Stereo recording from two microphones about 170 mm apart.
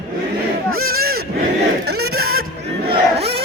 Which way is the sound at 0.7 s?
60° right (ahead or behind).